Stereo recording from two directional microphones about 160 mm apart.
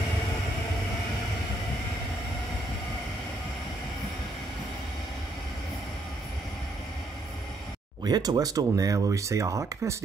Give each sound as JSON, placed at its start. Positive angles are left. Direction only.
{"t": 8.0, "sound": "speech", "side_deg": -25}